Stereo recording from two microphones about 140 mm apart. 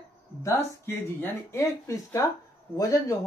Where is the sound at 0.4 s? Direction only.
20° left (ahead or behind).